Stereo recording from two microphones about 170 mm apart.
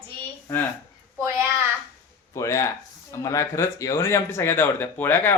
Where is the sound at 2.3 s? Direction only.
20° left (ahead or behind).